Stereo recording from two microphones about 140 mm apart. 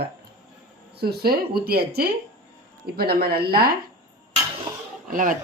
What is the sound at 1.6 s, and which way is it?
Speech, 90° right.